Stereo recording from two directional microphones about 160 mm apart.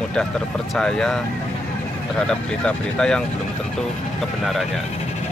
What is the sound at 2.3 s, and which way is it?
Speech, 5° left (ahead or behind).